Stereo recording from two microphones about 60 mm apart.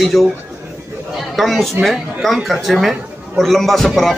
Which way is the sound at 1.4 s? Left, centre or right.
Centre.